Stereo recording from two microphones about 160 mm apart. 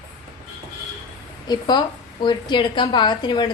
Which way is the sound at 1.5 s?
25° left (ahead or behind).